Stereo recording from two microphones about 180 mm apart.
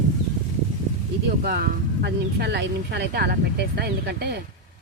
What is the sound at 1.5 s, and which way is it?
Speech, 60° right (ahead or behind).